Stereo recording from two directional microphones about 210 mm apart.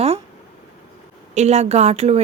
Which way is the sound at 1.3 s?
30° right (ahead or behind).